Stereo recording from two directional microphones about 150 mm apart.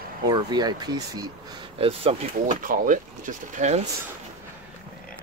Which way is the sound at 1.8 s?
40° right (ahead or behind).